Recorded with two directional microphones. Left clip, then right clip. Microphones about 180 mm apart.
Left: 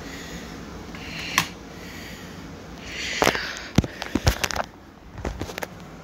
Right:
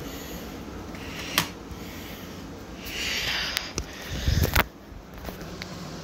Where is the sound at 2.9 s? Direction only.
10° right (ahead or behind).